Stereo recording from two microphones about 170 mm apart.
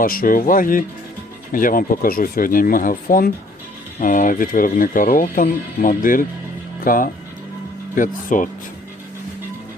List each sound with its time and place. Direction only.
0.0 s speech: 55° left (ahead or behind)